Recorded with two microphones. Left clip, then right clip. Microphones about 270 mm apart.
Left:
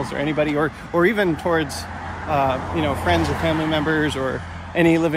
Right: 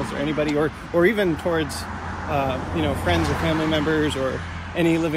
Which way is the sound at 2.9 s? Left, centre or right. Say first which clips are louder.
Left 3 dB; left.